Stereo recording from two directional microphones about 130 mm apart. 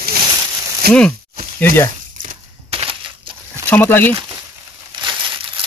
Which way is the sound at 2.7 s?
40° right (ahead or behind).